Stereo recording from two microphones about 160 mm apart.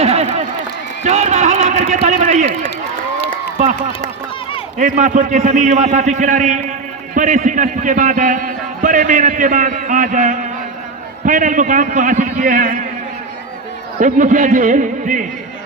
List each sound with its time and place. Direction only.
0.0 s a sound: 40° right (ahead or behind)
1.0 s a man's voice: 45° right (ahead or behind)
3.6 s a man's voice: 45° right (ahead or behind)
14.0 s a man's voice: 50° right (ahead or behind)